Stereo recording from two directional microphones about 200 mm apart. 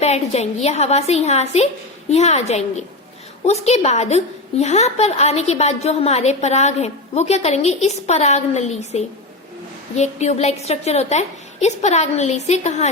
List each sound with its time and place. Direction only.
0.0 s a woman's voice: 35° left (ahead or behind)